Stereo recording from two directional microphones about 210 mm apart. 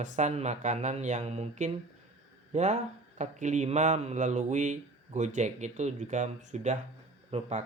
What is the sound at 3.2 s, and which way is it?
Mantra, 35° right (ahead or behind).